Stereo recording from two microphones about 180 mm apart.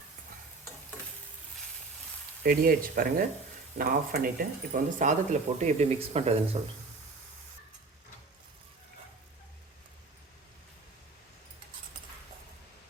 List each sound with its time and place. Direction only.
2.4 s speech: 55° right (ahead or behind); by 6.6 s 35° right (ahead or behind)